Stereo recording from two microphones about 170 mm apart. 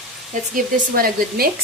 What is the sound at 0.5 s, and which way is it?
Speech, 60° right (ahead or behind).